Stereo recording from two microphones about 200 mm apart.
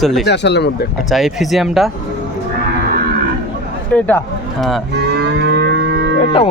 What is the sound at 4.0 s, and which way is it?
Speech, 10° left (ahead or behind).